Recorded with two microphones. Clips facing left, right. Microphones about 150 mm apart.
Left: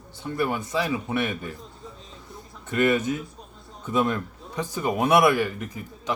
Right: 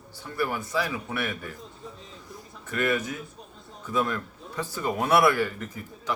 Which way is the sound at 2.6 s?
20° left (ahead or behind).